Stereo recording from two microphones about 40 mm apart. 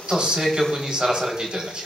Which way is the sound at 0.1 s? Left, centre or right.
Centre.